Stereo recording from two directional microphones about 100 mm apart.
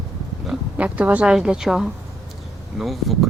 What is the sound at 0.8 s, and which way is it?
Speech, 15° right (ahead or behind).